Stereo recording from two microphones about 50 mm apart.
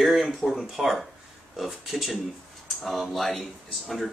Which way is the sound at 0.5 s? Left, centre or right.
Centre.